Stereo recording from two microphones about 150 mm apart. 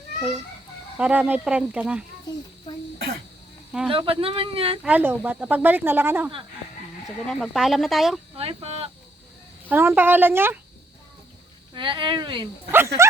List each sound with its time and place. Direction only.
0.9 s speech: 10° right (ahead or behind)
3.7 s speech: 5° right (ahead or behind)
3.9 s speech: 35° right (ahead or behind)
4.8 s speech: 10° right (ahead or behind)
7.3 s speech: centre (ahead or behind)
8.4 s speech: 40° right (ahead or behind)
9.6 s speech: 10° right (ahead or behind)
11.7 s speech: 30° right (ahead or behind)
12.7 s speech: 15° right (ahead or behind)